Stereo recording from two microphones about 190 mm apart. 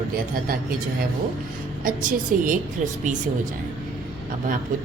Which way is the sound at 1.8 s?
45° right (ahead or behind).